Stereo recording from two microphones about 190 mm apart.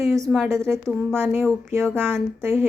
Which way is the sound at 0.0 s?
15° right (ahead or behind).